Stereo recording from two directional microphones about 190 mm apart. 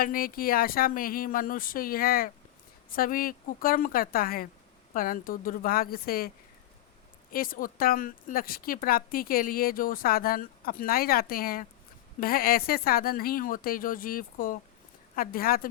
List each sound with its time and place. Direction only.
0.0 s speech: 50° left (ahead or behind)